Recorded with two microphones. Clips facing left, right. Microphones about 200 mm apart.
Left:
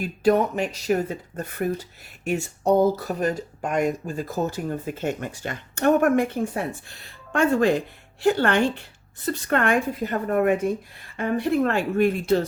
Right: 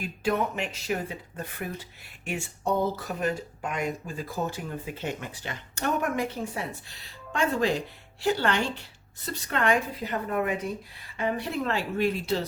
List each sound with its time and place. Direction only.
0.0 s speech: 40° left (ahead or behind)